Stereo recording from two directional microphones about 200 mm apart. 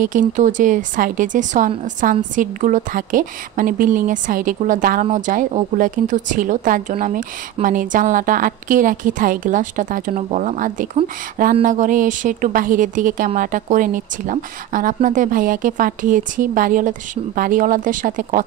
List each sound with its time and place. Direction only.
0.0 s a woman's voice: 40° right (ahead or behind)